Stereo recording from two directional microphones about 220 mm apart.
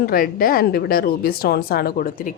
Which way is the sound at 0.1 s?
40° left (ahead or behind).